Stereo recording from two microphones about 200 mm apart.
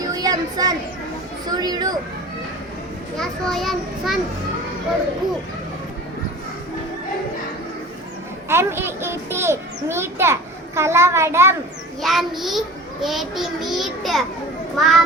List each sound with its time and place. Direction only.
0.0 s children playing: 20° right (ahead or behind)
1.5 s speech: 20° right (ahead or behind)
3.2 s a child's voice: centre (ahead or behind)
8.4 s a child's voice: 10° right (ahead or behind)
12.0 s a child's voice: centre (ahead or behind)